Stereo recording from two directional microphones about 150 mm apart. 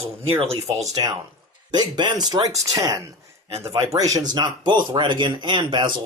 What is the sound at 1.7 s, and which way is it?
Speech, 30° right (ahead or behind).